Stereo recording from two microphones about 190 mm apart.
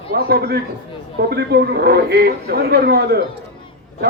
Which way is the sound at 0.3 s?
55° right (ahead or behind).